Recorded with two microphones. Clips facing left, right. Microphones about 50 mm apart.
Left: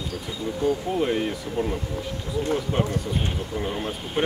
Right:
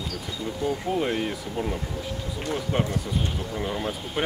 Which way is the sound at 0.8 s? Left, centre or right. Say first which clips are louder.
Left 2 dB; centre.